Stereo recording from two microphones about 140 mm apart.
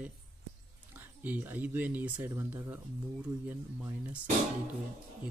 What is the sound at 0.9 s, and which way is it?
Speech, 15° right (ahead or behind).